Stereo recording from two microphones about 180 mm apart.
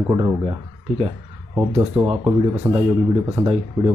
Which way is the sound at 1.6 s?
10° right (ahead or behind).